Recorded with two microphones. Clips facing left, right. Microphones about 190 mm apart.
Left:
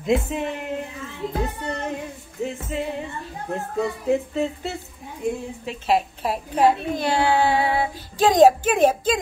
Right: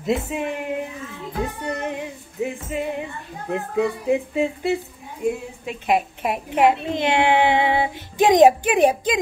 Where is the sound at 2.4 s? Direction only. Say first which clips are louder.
Right 2 dB; 15° right (ahead or behind).